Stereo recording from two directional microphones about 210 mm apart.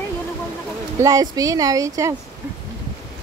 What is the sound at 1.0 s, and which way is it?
Speech, 15° right (ahead or behind).